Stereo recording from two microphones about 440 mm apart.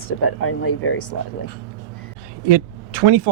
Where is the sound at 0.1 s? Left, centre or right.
Left.